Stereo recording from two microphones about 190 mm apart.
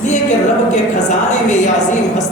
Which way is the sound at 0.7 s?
40° left (ahead or behind).